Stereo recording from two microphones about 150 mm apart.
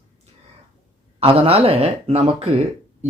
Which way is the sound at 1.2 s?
40° right (ahead or behind).